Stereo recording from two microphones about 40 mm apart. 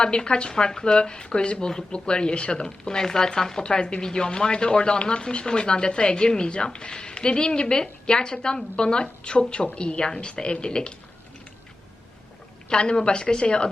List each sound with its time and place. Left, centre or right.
0.0 s speech: left
12.6 s speech: left